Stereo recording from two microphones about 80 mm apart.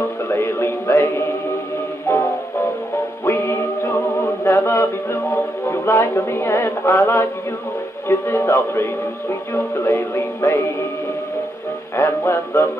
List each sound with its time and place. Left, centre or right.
0.3 s music: left
3.3 s music: left
4.2 s chant: left
4.6 s music: left
12.0 s music: left